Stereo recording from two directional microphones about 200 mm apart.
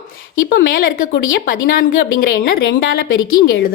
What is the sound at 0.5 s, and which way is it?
Speech, 45° left (ahead or behind).